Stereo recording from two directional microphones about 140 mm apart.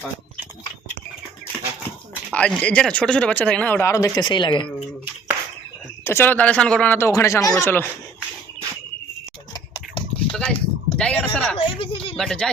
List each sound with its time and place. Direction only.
2.3 s speech: 10° left (ahead or behind); by 4.6 s 35° left (ahead or behind)
6.1 s speech: 15° left (ahead or behind)
9.5 s a sound: 35° left (ahead or behind)
10.3 s a sound: 5° left (ahead or behind)
11.5 s speech: 40° left (ahead or behind)
12.1 s speech: 5° left (ahead or behind)